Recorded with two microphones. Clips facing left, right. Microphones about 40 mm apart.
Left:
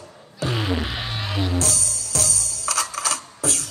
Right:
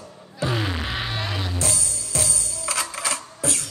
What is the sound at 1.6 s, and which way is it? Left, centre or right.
Music, right.